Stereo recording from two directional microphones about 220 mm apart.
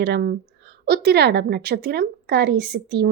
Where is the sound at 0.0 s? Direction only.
45° right (ahead or behind).